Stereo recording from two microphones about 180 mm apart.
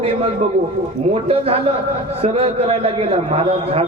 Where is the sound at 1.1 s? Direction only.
35° right (ahead or behind).